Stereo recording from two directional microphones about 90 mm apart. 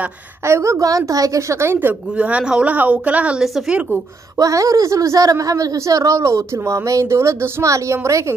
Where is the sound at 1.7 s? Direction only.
15° right (ahead or behind).